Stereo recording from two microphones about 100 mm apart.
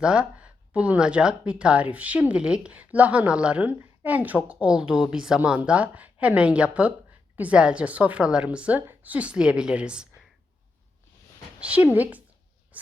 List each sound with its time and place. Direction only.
0.0 s speech: 10° right (ahead or behind)
11.6 s speech: 15° right (ahead or behind)
12.7 s a sound: 15° right (ahead or behind)